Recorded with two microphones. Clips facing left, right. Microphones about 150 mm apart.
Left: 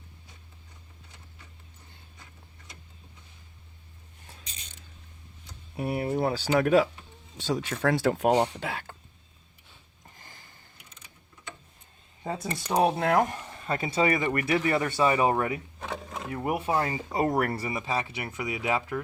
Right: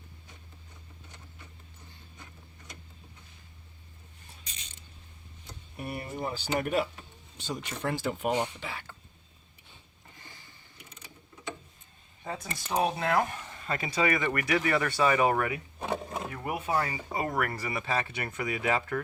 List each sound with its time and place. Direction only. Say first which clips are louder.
5.7 s speech: left 9 dB; 70° left (ahead or behind); by 8.3 s 90° left
8.3 s speech: left 5 dB; 35° left (ahead or behind)
8.6 s speech: left 6 dB; 65° left (ahead or behind)
12.2 s speech: left 5 dB; 35° left (ahead or behind)
13.0 s speech: left 4 dB; 50° left (ahead or behind)
13.4 s speech: left 3 dB; 25° left (ahead or behind)
15.9 s a sound: right 3 dB; 10° right (ahead or behind)
16.3 s speech: left 4 dB; 30° left (ahead or behind)
16.9 s speech: left 5 dB; 40° left (ahead or behind); by 18.9 s 15° left (ahead or behind)